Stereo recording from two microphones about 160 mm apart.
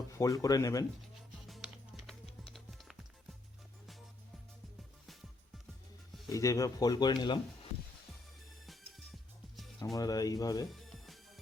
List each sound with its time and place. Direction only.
0.1 s speech: 20° left (ahead or behind)
1.5 s music: centre (ahead or behind)
6.2 s speech: 20° left (ahead or behind)
9.7 s speech: 20° left (ahead or behind)
10.7 s music: centre (ahead or behind)